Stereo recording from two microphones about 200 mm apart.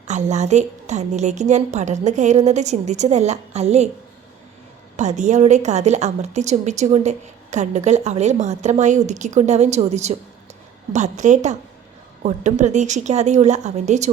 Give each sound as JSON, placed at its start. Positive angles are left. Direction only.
{"t": 0.1, "sound": "a woman's voice", "side_deg": -35}
{"t": 4.9, "sound": "a woman's voice", "side_deg": -35}